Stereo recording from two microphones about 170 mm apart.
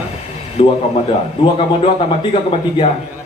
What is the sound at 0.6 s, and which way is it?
Speech, 30° left (ahead or behind).